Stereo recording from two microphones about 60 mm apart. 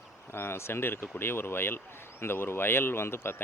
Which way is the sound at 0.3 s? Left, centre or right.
Left.